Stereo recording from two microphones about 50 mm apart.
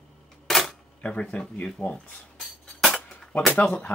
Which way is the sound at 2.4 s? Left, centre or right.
Centre.